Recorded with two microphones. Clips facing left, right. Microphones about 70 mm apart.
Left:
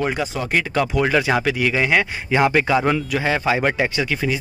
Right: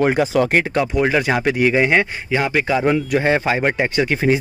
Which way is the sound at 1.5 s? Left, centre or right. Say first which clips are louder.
Right 3 dB; right.